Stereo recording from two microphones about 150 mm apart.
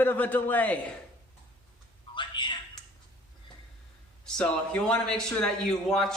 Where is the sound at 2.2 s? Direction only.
30° left (ahead or behind).